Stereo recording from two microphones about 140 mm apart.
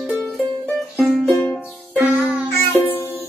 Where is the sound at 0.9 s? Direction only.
5° left (ahead or behind).